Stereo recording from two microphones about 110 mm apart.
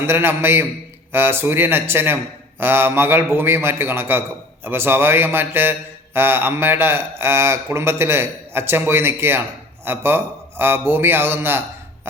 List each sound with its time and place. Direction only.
0.0 s a man's voice: 20° right (ahead or behind)